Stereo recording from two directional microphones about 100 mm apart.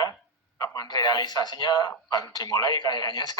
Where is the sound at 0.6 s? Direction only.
40° left (ahead or behind).